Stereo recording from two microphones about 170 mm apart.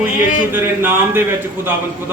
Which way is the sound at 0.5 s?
10° right (ahead or behind).